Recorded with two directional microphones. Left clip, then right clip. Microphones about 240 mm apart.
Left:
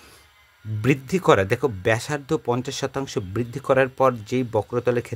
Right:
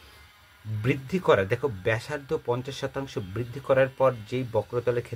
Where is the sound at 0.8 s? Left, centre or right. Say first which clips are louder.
Left 6 dB; left.